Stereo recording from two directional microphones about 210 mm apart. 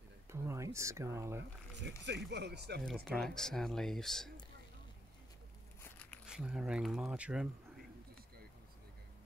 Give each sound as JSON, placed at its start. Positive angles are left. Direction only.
{"t": 0.3, "sound": "a sound", "side_deg": -15}
{"t": 0.7, "sound": "speech", "side_deg": -15}
{"t": 2.0, "sound": "speech", "side_deg": -55}
{"t": 3.1, "sound": "speech", "side_deg": 0}
{"t": 5.8, "sound": "a sound", "side_deg": 10}
{"t": 6.2, "sound": "speech", "side_deg": -5}